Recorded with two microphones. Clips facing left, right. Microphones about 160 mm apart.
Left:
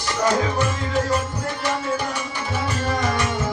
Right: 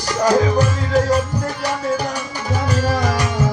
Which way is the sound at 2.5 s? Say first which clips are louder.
Right 5 dB; 40° right (ahead or behind).